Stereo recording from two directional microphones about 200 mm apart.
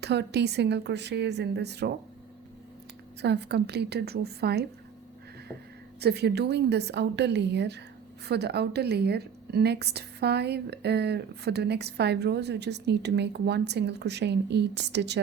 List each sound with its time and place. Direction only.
0.0 s a woman's voice: 55° right (ahead or behind)
3.2 s a woman's voice: 55° right (ahead or behind)
6.0 s a woman's voice: 55° right (ahead or behind)